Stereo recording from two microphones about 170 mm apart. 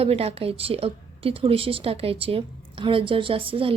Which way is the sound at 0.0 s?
35° right (ahead or behind).